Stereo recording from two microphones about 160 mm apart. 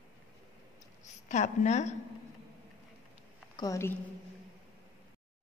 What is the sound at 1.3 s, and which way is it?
Speech, 50° left (ahead or behind).